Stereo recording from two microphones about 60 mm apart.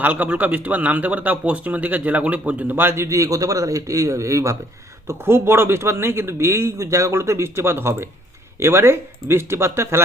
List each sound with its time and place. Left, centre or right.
0.0 s a man's voice: right
5.0 s speech: right